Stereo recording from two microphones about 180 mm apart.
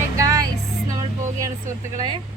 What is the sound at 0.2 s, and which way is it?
Music, 20° right (ahead or behind).